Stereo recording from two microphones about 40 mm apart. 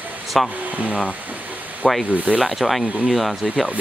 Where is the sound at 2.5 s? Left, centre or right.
Centre.